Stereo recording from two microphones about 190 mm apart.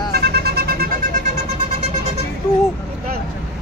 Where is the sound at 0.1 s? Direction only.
60° right (ahead or behind).